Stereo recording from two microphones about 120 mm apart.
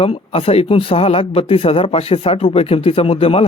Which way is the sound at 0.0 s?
55° left (ahead or behind).